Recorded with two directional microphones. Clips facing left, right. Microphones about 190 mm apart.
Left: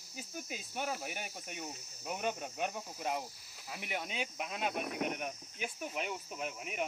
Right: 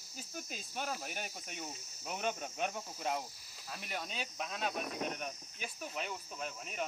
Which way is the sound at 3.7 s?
15° left (ahead or behind).